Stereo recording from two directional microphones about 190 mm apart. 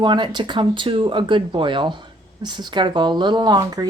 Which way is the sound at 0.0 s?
25° right (ahead or behind).